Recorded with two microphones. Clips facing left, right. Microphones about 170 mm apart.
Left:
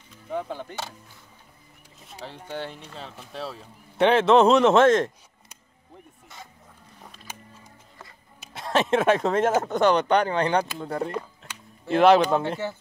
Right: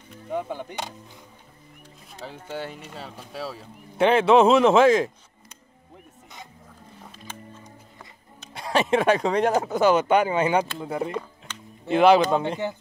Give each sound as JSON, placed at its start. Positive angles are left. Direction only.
{"t": 0.3, "sound": "speech", "side_deg": -15}
{"t": 2.5, "sound": "speech", "side_deg": -5}
{"t": 7.6, "sound": "speech", "side_deg": 5}